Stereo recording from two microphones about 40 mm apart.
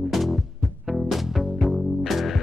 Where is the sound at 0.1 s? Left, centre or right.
Centre.